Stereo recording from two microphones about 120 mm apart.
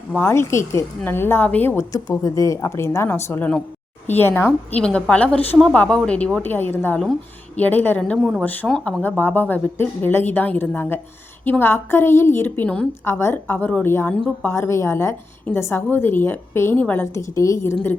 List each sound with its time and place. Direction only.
0.1 s a woman's voice: 20° left (ahead or behind)
1.9 s a woman's voice: 30° left (ahead or behind); by 12.9 s 10° left (ahead or behind)
13.1 s a woman's voice: 20° left (ahead or behind)
17.2 s a woman's voice: 25° left (ahead or behind)